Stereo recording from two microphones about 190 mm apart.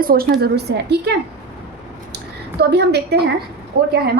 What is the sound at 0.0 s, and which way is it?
A woman's voice, 50° right (ahead or behind).